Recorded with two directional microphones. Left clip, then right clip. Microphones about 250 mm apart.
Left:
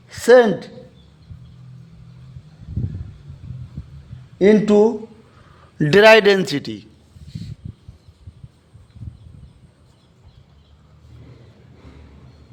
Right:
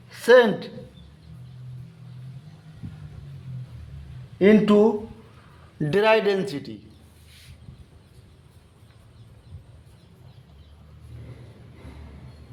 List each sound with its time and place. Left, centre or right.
0.1 s a woman's voice: left
4.4 s speech: left
5.8 s a man's voice: left